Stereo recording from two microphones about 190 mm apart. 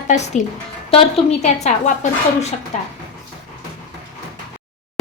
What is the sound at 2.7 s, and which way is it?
Speech, 35° left (ahead or behind).